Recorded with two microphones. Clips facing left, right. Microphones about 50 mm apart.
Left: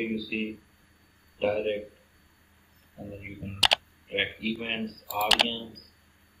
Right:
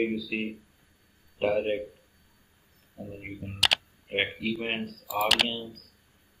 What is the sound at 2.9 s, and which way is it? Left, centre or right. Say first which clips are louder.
Speech: right 1 dB; centre.